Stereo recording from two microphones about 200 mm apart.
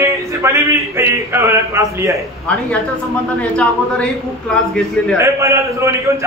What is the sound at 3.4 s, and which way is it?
Speech, 5° left (ahead or behind).